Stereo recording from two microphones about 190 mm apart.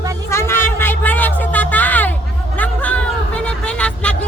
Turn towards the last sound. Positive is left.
turn(degrees=5)  # may be behind; listen again after turning